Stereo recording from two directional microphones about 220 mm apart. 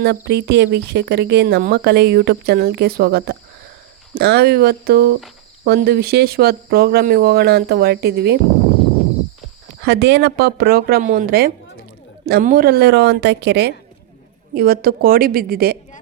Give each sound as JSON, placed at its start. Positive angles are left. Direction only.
{"t": 0.3, "sound": "a woman's voice", "side_deg": -50}
{"t": 9.8, "sound": "a woman's voice", "side_deg": -50}